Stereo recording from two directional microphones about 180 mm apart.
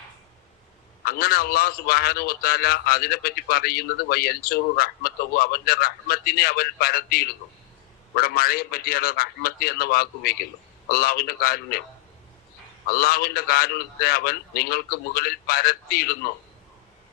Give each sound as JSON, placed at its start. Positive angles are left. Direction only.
{"t": 1.0, "sound": "a man's voice", "side_deg": 55}
{"t": 12.9, "sound": "a man's voice", "side_deg": 55}